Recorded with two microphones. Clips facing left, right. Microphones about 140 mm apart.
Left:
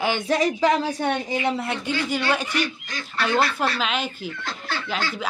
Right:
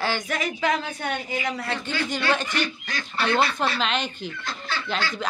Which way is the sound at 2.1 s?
10° left (ahead or behind).